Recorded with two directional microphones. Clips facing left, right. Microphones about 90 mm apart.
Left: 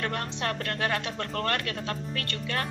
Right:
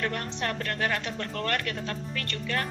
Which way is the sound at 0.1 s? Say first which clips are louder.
Left 1 dB; 65° left (ahead or behind).